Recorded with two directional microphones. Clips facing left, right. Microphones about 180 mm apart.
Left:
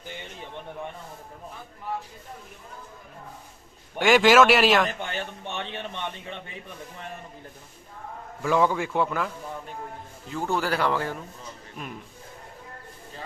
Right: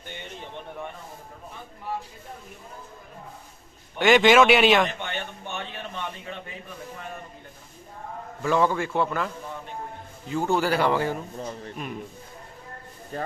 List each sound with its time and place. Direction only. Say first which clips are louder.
3.9 s speech: even; 5° left (ahead or behind)
5.0 s a sound: left 1 dB; 30° left (ahead or behind)
8.4 s a man's voice: even; 10° left (ahead or behind)
13.1 s speech: right 9 dB; 55° right (ahead or behind)